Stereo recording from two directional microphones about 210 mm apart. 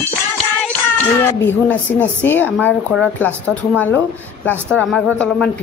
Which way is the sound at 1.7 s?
5° left (ahead or behind).